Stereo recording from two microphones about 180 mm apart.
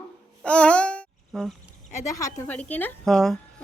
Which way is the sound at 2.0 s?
20° left (ahead or behind).